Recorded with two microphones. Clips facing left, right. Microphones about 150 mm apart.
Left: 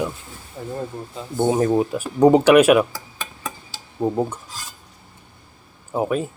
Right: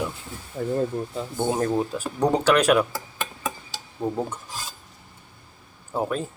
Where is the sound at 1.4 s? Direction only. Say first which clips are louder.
Left 6 dB; 10° left (ahead or behind).